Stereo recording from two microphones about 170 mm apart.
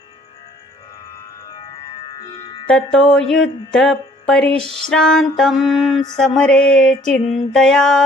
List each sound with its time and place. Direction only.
1.5 s music: 25° left (ahead or behind)
2.6 s music: 5° left (ahead or behind)